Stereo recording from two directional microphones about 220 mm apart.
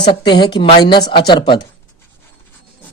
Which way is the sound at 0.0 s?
20° left (ahead or behind).